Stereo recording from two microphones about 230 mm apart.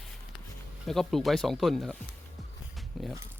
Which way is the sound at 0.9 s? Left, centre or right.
Centre.